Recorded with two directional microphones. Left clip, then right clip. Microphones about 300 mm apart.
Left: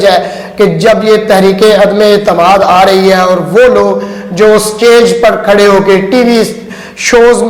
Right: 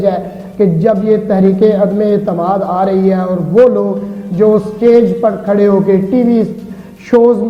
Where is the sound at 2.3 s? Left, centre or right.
Centre.